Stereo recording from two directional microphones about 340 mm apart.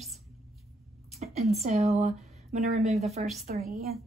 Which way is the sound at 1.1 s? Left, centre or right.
Centre.